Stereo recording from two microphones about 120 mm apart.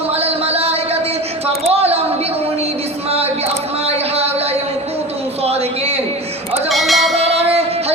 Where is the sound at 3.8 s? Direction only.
60° right (ahead or behind).